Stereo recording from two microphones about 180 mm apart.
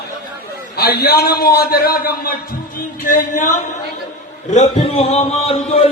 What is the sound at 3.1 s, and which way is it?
Speech, 45° left (ahead or behind).